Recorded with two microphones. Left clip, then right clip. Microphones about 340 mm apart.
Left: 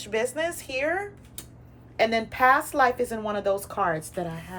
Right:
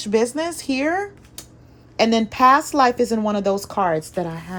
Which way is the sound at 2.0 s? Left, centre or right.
Centre.